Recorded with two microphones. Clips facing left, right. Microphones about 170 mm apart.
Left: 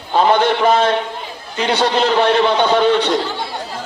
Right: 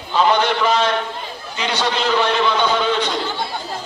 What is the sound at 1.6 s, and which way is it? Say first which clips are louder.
A man's voice: left 6 dB; 55° left (ahead or behind).